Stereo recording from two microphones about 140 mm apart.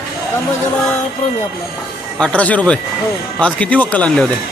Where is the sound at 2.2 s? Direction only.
10° left (ahead or behind).